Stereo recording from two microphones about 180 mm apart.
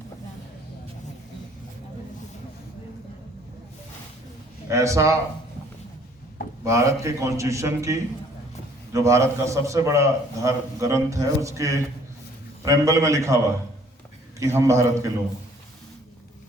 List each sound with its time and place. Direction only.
4.7 s a man's voice: 15° right (ahead or behind)
6.7 s a man's voice: 15° right (ahead or behind)